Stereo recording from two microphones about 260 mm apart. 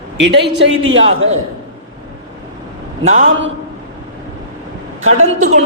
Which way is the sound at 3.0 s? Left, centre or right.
Right.